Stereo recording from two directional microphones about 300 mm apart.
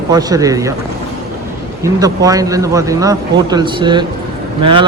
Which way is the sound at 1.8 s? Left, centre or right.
Centre.